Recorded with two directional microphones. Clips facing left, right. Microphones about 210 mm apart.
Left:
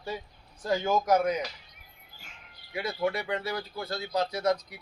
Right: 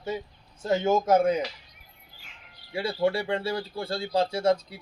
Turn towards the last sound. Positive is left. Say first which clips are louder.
# right 4 dB
turn(degrees=-30)  # may be behind; listen again after turning